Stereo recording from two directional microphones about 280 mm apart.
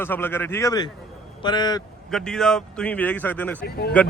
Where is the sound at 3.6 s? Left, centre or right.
Left.